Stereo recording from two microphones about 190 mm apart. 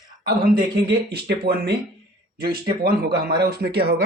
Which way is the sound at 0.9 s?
60° right (ahead or behind).